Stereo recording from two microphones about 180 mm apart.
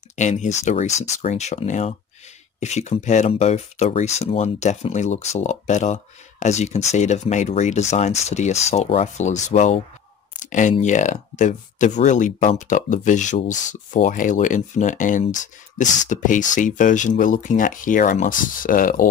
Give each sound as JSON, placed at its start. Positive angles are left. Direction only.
{"t": 0.1, "sound": "speech", "side_deg": 40}